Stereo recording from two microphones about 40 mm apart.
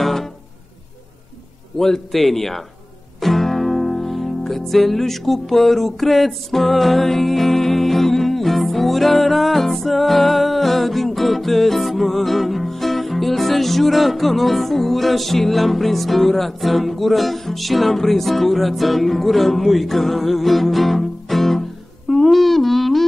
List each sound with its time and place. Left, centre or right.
0.0 s music: centre
1.8 s a man's voice: centre
3.2 s music: centre
22.1 s humming: centre